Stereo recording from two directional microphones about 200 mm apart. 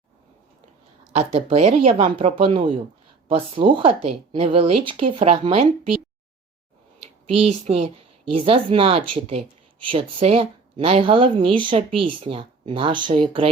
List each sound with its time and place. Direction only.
1.1 s speech: 30° right (ahead or behind)
7.3 s speech: 30° right (ahead or behind)